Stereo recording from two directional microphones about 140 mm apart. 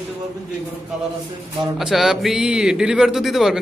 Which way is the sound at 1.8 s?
Centre (ahead or behind).